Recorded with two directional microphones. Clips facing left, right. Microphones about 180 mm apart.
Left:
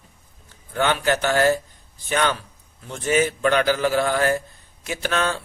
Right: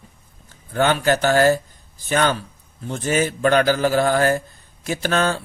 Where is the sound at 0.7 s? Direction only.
40° right (ahead or behind).